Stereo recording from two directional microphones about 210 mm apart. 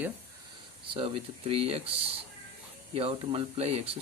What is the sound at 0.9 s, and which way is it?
Speech, 25° right (ahead or behind).